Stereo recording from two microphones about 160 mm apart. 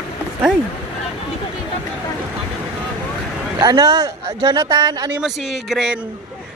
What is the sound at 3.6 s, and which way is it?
Speech, 25° right (ahead or behind).